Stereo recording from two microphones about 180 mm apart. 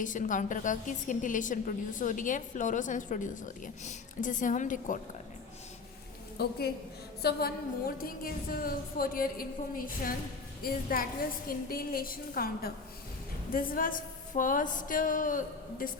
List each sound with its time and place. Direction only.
0.0 s a woman's voice: 45° left (ahead or behind)
6.3 s a woman's voice: 60° left (ahead or behind)